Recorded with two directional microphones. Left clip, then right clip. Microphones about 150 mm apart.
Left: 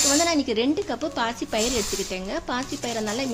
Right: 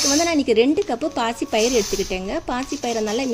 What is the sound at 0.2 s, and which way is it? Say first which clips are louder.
Speech: right 5 dB; 30° right (ahead or behind).